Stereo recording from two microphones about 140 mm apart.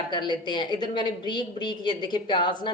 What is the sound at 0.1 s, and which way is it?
A woman's voice, 30° left (ahead or behind).